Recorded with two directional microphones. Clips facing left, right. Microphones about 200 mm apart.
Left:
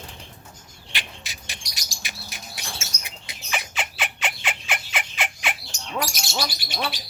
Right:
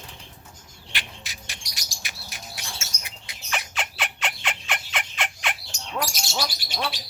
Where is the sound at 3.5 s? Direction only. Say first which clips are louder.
Left 1 dB; centre (ahead or behind).